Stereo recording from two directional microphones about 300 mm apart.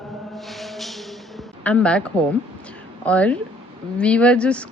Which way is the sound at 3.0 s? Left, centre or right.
Centre.